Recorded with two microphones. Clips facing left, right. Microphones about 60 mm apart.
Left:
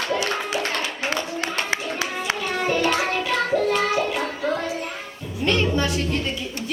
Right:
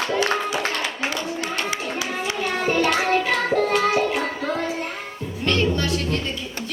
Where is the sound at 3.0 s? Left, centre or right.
Right.